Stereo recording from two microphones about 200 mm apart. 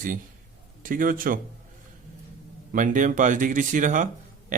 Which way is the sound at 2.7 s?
40° right (ahead or behind).